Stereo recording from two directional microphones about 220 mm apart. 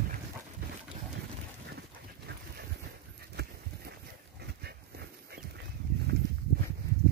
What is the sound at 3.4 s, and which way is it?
Horse, 45° right (ahead or behind).